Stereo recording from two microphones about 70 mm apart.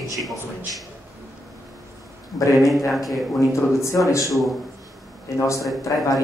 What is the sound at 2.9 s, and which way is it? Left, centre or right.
Speech, centre.